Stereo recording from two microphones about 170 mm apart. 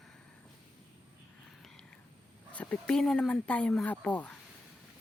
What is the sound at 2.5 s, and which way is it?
Speech, 10° left (ahead or behind).